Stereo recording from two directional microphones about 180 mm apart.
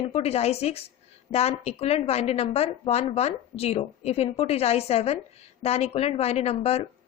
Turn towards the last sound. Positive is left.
turn(degrees=35)  # may be behind; listen again after turning